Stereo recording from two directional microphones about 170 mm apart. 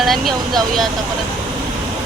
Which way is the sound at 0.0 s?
Centre (ahead or behind).